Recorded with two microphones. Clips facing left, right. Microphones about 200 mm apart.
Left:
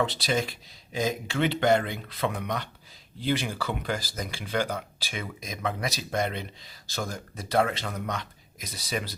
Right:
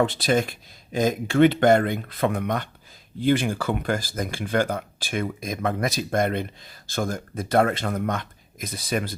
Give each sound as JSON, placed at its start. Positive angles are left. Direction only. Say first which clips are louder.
{"t": 0.0, "sound": "speech", "louder": "right 6 dB", "side_deg": -50}